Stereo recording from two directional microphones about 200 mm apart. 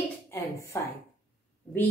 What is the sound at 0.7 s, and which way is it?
Speech, 15° left (ahead or behind).